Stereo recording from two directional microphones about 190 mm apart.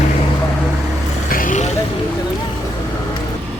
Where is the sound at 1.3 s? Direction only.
45° left (ahead or behind).